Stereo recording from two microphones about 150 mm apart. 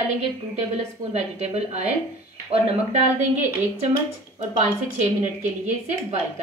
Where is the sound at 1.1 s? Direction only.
50° right (ahead or behind).